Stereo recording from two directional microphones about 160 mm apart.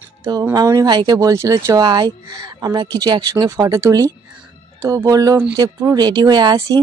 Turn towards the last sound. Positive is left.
turn(degrees=-25)  # may be behind; listen again after turning